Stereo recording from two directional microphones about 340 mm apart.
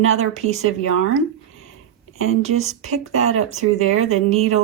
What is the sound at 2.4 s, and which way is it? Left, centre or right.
Speech, centre.